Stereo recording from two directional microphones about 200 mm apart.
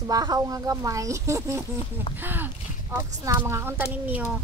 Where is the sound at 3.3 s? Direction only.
15° right (ahead or behind).